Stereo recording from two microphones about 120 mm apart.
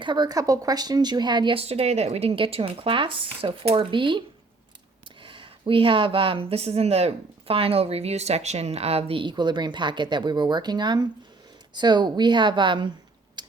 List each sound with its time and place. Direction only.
0.0 s speech: 40° right (ahead or behind)
1.5 s speech: 55° right (ahead or behind)
5.2 s speech: 45° right (ahead or behind)
13.4 s typing: 40° right (ahead or behind)